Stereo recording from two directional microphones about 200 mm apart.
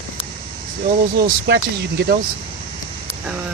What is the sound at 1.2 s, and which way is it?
Speech, 55° right (ahead or behind).